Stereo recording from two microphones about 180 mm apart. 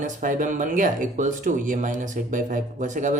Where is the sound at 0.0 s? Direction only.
45° right (ahead or behind).